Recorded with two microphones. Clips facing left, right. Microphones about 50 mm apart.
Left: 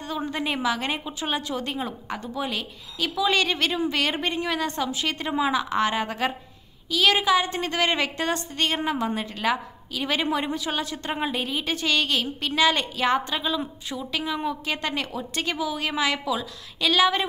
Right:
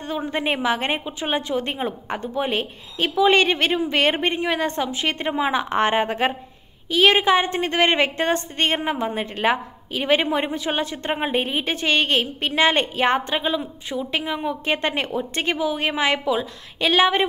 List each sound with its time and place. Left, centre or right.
0.0 s a woman's voice: right
1.0 s a woman's voice: right